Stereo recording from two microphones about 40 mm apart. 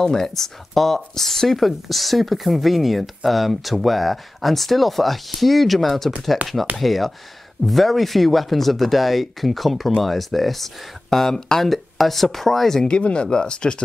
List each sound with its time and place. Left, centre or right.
0.0 s speech: centre
12.8 s speech: left